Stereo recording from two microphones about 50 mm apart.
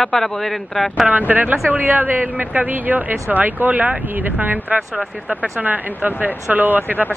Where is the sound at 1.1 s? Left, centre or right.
Right.